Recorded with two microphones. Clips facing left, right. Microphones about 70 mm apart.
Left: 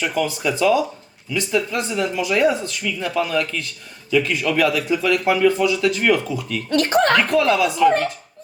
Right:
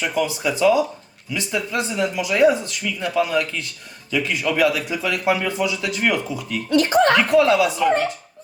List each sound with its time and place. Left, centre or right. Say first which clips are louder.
0.1 s speech: even; centre
6.7 s speech: right 1 dB; left
7.3 s speech: right 2 dB; centre